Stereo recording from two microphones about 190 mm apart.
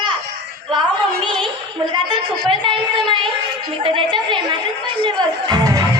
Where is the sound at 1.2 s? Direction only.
25° right (ahead or behind).